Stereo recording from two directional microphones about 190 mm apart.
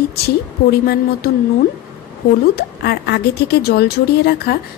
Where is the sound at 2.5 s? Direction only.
55° left (ahead or behind).